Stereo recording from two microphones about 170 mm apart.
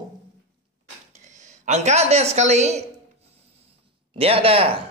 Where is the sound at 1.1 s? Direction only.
45° right (ahead or behind).